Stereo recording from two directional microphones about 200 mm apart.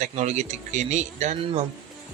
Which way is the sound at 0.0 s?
35° right (ahead or behind).